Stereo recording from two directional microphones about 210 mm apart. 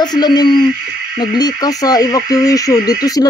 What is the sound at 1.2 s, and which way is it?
Frog, 20° left (ahead or behind).